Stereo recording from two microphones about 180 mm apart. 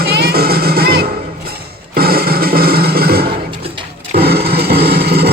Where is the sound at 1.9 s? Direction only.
55° right (ahead or behind).